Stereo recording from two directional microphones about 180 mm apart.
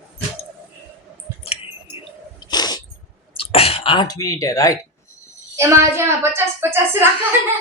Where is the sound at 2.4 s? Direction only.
25° left (ahead or behind).